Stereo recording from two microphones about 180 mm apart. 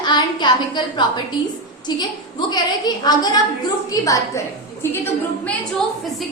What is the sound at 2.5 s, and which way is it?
A woman's voice, 20° left (ahead or behind).